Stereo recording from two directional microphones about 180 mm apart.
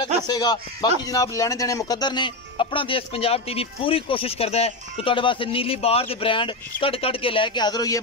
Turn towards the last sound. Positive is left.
turn(degrees=20)  # may be behind; listen again after turning